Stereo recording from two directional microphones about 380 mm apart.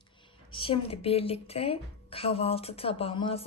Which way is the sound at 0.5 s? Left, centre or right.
Centre.